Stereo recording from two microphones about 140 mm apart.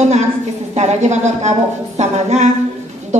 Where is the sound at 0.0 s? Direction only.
55° right (ahead or behind).